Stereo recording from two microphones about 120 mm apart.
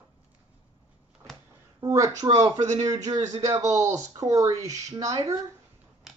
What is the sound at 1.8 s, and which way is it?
Speech, 25° right (ahead or behind).